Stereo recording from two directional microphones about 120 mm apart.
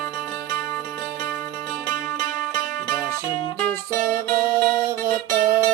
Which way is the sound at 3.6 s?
15° left (ahead or behind).